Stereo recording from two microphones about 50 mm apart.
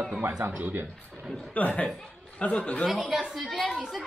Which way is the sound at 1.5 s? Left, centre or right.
Left.